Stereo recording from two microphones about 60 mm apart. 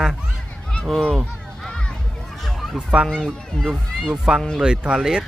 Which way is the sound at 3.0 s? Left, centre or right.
Centre.